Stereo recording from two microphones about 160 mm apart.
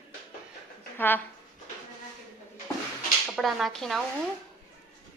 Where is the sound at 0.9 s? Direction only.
10° left (ahead or behind).